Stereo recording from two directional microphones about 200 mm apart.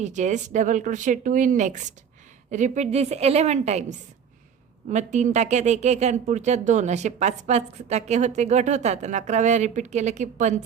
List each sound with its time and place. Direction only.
0.0 s speech: 35° right (ahead or behind)